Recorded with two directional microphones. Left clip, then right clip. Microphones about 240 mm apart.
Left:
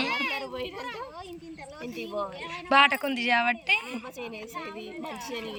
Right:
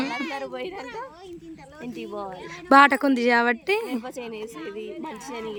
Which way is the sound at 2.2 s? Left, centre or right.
Right.